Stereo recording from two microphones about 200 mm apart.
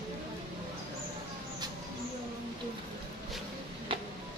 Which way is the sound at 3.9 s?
25° right (ahead or behind).